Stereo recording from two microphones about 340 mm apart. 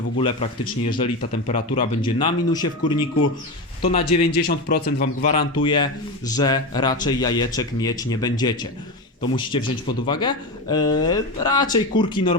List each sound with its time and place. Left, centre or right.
0.2 s a man's voice: centre
3.8 s speech: centre
4.0 s a man's voice: left